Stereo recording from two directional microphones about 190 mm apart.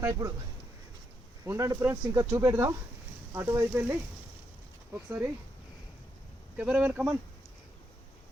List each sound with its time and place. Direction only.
0.0 s speech: 15° right (ahead or behind)
1.5 s speech: 15° right (ahead or behind)
6.6 s speech: 10° right (ahead or behind)